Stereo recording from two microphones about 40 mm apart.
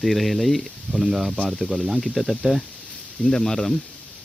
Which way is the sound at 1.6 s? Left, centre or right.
Centre.